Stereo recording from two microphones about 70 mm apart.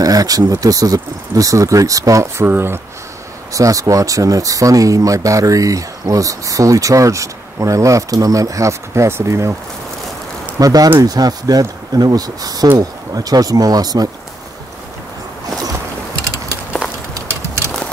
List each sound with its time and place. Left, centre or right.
0.0 s speech: right
2.4 s speech: right
3.5 s speech: right
10.6 s speech: right